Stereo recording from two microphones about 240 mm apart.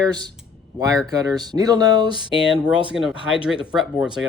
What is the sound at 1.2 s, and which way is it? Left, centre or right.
Speech, centre.